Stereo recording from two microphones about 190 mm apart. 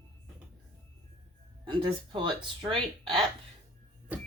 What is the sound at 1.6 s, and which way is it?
Speech, 25° right (ahead or behind).